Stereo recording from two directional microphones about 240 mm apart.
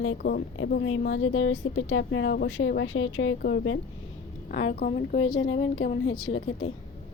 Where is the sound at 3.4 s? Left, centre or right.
Left.